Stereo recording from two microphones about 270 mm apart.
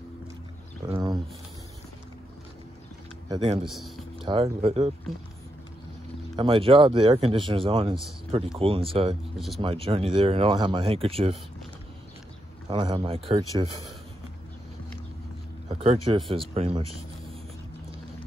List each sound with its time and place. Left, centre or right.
0.8 s a sound: centre
3.3 s speech: centre
3.6 s a man's voice: centre
4.2 s speech: centre
6.3 s speech: centre
12.6 s speech: centre
15.7 s speech: centre